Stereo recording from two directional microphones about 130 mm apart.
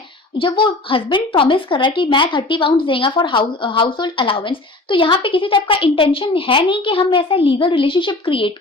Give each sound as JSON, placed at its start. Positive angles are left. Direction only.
{"t": 0.3, "sound": "a woman's voice", "side_deg": 40}